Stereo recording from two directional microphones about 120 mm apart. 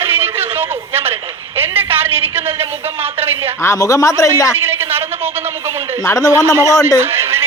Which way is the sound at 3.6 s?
25° left (ahead or behind).